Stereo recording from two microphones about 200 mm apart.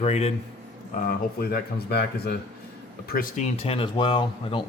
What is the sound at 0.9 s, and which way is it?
Speech, 45° left (ahead or behind).